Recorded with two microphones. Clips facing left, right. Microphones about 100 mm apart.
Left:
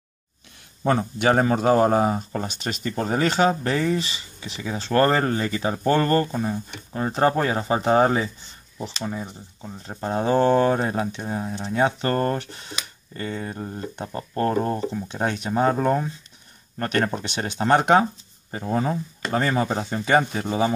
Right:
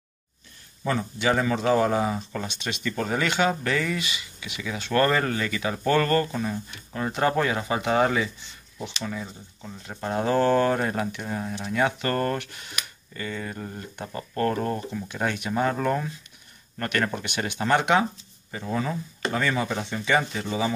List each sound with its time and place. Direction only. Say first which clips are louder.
0.8 s speech: left 4 dB; 50° left (ahead or behind)
9.0 s speech: left 3 dB; 25° left (ahead or behind); by 20.7 s 50° left (ahead or behind)